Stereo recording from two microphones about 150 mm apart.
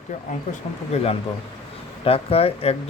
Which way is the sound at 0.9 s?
45° left (ahead or behind).